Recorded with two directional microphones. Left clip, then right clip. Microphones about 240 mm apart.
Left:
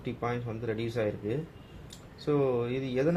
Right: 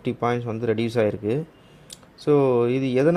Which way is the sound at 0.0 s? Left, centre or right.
Right.